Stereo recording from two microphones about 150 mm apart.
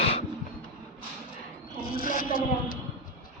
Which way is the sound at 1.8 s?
75° left (ahead or behind).